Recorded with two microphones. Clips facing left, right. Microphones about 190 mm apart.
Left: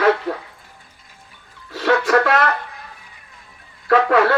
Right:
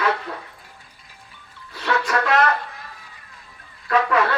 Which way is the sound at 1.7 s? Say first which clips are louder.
Left 6 dB; 70° left (ahead or behind).